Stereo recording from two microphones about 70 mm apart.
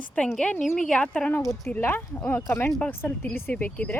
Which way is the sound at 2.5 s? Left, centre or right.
Left.